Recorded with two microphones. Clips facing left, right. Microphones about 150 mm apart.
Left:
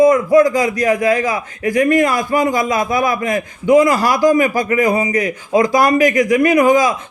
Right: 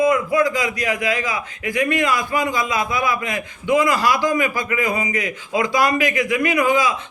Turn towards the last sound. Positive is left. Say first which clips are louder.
# left 6 dB
turn(degrees=40)  # may be behind; listen again after turning